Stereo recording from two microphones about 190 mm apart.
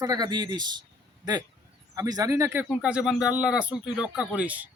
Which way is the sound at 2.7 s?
5° right (ahead or behind).